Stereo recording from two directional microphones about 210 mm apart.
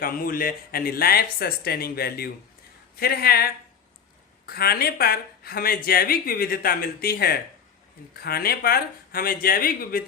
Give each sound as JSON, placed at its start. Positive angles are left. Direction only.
{"t": 0.0, "sound": "speech", "side_deg": 45}